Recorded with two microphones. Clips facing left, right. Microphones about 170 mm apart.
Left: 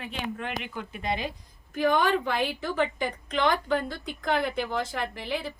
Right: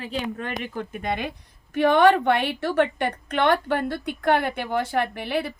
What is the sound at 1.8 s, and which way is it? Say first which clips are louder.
A woman's voice: right 7 dB; 70° right (ahead or behind).